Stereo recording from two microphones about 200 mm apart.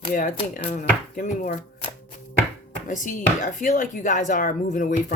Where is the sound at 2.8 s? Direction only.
40° left (ahead or behind).